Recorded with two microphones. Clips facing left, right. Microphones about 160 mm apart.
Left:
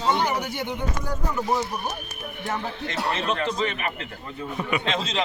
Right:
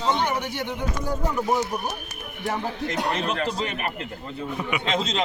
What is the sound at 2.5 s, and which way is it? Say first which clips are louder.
Speech: right 2 dB; 15° right (ahead or behind).